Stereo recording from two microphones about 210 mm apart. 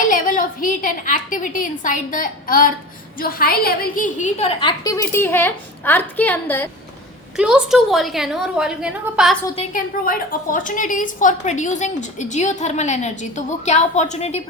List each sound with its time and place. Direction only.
0.1 s a woman's voice: 40° left (ahead or behind); by 6.7 s 10° left (ahead or behind)
7.3 s a woman's voice: 5° right (ahead or behind)
9.7 s a woman's voice: 40° left (ahead or behind)